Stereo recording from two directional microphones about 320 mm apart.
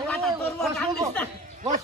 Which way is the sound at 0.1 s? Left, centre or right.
Centre.